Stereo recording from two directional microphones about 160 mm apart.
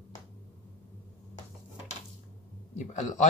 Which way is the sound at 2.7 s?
50° left (ahead or behind).